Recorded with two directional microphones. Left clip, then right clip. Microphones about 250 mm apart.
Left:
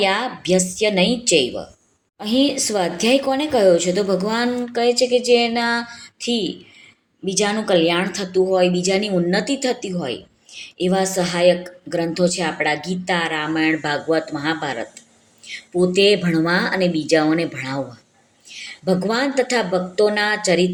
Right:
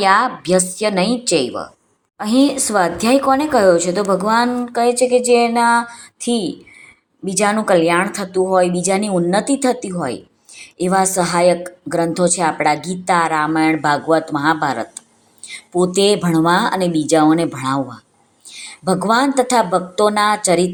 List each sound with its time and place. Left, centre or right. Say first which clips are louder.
0.0 s a woman's voice: right 6 dB; centre
15.7 s a woman's voice: right 1 dB; centre